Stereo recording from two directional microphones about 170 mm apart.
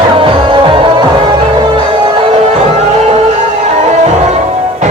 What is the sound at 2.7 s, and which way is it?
Music, 40° right (ahead or behind).